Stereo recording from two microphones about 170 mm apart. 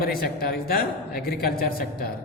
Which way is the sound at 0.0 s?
60° left (ahead or behind).